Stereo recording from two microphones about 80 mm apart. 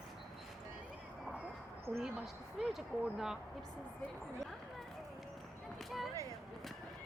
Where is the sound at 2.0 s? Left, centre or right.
Centre.